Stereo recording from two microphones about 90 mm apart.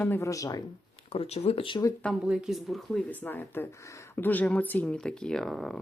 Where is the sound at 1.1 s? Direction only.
90° left.